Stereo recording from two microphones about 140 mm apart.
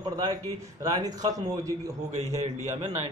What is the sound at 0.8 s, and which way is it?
Speech, 25° right (ahead or behind).